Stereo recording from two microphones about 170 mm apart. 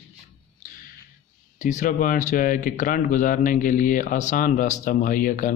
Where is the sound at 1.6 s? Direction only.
45° left (ahead or behind).